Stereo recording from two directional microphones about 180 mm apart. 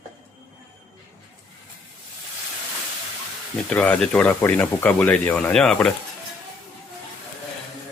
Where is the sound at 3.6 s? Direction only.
5° left (ahead or behind).